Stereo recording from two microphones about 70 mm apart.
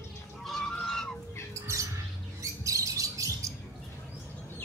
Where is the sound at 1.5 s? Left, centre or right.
Right.